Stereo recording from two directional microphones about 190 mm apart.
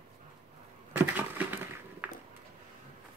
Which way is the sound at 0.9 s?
10° right (ahead or behind).